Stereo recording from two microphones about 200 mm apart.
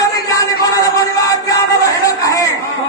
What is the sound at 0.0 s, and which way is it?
Music, 15° left (ahead or behind).